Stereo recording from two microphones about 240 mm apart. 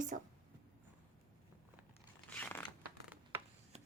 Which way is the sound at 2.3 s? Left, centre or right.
Centre.